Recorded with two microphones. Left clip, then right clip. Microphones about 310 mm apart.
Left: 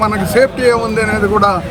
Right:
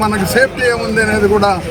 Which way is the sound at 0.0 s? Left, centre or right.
Centre.